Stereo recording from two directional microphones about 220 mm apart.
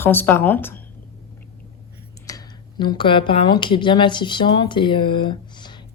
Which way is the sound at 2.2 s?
20° left (ahead or behind).